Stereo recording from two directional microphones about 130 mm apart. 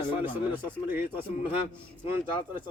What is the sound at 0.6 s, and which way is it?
Speech, 15° right (ahead or behind).